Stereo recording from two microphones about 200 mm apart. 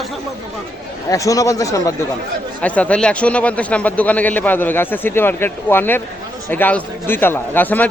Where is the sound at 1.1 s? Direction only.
15° left (ahead or behind).